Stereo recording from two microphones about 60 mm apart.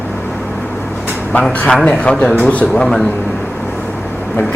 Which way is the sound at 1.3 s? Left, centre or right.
Centre.